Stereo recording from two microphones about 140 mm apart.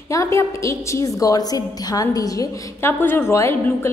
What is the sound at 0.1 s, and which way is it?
A woman's voice, 20° left (ahead or behind).